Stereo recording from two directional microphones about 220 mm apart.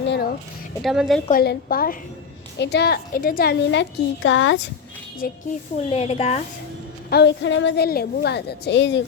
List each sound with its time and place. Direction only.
0.0 s a sound: 50° left (ahead or behind)
0.8 s a woman's voice: centre (ahead or behind)
1.3 s a woman's voice: 45° left (ahead or behind); by 4.5 s 60° left (ahead or behind)
5.2 s a woman's voice: 40° left (ahead or behind)
5.7 s a woman's voice: 25° left (ahead or behind)
7.1 s a woman's voice: 50° left (ahead or behind)